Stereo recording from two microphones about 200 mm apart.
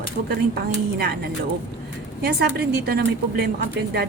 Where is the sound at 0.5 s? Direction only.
50° right (ahead or behind).